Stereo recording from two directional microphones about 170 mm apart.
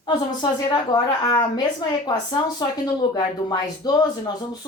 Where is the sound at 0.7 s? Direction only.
25° left (ahead or behind).